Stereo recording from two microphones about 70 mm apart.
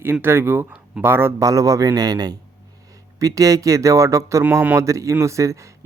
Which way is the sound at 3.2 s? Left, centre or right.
Right.